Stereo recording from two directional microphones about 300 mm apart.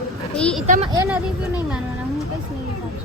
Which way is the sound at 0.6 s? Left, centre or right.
Right.